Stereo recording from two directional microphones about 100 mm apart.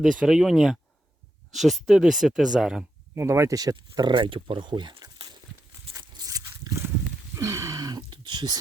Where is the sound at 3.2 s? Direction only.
25° right (ahead or behind); by 5.4 s 50° right (ahead or behind).